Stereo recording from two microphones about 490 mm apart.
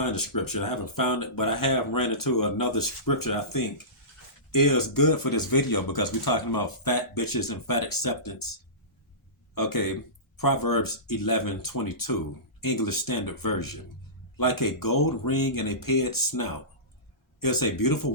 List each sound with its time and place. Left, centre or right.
0.0 s speech: left
9.6 s speech: left